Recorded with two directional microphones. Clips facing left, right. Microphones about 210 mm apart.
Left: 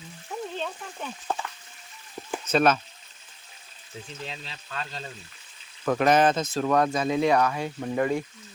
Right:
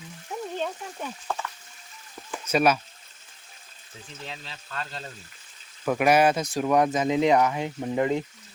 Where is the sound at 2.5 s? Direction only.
10° right (ahead or behind).